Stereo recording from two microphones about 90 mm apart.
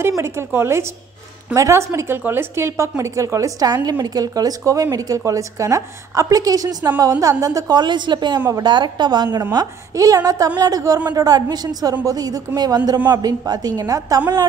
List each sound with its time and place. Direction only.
0.1 s a woman's voice: 30° right (ahead or behind); by 9.4 s 55° right (ahead or behind)
9.5 s a woman's voice: 40° right (ahead or behind)